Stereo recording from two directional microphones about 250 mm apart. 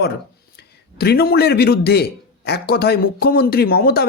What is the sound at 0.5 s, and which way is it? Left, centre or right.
A man's voice, left.